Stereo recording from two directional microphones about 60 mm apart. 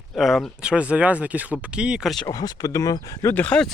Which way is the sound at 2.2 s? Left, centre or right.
Left.